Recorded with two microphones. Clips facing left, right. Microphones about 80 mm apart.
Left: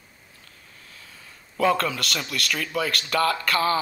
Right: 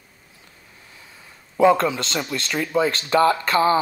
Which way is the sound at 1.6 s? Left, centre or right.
Right.